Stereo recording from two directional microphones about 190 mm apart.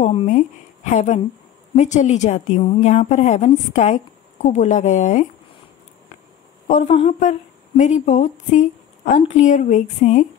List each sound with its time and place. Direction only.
0.0 s a woman's voice: 35° left (ahead or behind)
6.7 s a woman's voice: 40° left (ahead or behind)